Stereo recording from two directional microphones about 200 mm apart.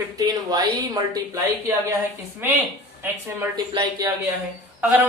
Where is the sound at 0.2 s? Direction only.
20° right (ahead or behind).